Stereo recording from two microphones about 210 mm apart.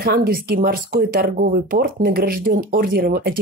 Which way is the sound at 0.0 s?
45° right (ahead or behind).